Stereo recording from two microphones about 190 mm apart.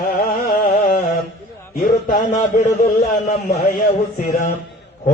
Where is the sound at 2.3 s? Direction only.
40° left (ahead or behind).